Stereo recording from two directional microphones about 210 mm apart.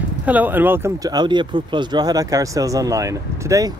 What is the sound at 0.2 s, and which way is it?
Speech, 10° right (ahead or behind).